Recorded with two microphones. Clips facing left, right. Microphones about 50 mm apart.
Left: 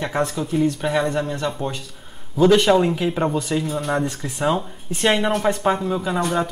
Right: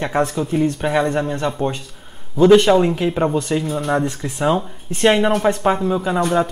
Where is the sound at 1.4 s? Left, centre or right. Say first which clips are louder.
Right 4 dB; right.